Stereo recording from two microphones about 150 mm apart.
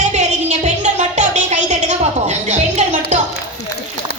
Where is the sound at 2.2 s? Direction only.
50° right (ahead or behind).